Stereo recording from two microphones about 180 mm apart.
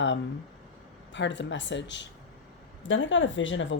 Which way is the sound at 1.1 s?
85° left.